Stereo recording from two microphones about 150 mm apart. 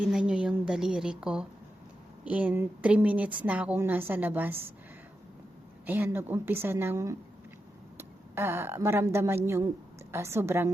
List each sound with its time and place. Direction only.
0.0 s a woman's voice: 5° right (ahead or behind)
5.8 s a woman's voice: 15° right (ahead or behind)